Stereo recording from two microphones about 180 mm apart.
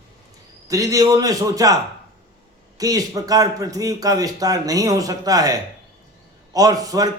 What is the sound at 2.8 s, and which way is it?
Speech, 20° right (ahead or behind).